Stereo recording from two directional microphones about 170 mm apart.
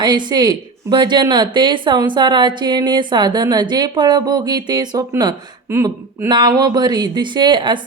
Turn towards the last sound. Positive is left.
turn(degrees=-30)  # may be behind; listen again after turning